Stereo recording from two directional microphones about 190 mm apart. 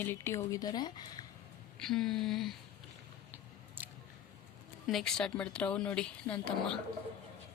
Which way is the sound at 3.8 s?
10° right (ahead or behind).